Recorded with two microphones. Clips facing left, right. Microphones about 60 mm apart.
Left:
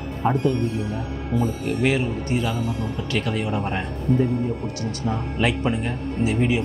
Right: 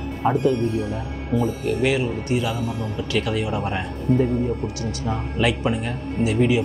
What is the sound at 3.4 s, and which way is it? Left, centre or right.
Speech, centre.